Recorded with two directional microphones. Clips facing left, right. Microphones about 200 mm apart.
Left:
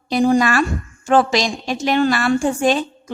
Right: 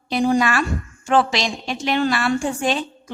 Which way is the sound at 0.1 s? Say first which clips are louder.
Left 3 dB; 45° left (ahead or behind).